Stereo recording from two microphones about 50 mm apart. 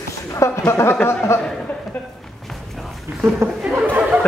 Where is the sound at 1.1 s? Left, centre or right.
Left.